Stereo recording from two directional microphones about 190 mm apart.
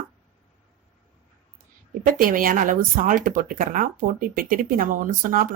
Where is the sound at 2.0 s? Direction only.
45° right (ahead or behind).